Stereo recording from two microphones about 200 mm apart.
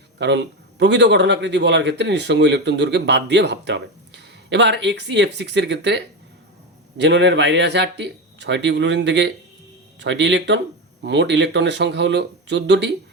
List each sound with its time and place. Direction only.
0.2 s a man's voice: 60° right (ahead or behind)